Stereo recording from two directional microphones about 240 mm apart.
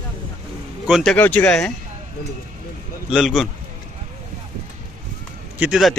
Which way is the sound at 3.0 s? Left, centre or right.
Centre.